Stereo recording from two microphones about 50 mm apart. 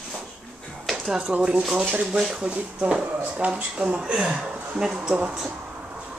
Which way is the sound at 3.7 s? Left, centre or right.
Right.